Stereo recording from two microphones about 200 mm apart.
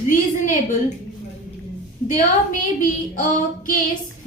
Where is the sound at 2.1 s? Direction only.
40° left (ahead or behind).